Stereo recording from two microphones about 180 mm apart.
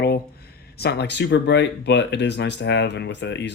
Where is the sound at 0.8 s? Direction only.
65° left (ahead or behind).